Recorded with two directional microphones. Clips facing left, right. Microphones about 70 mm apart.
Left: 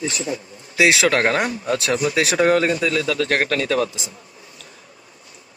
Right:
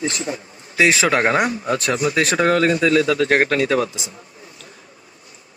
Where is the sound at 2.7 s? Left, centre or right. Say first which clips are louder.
Right 4 dB; centre.